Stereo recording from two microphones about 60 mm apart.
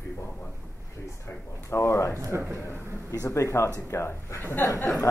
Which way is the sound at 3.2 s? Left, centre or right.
Left.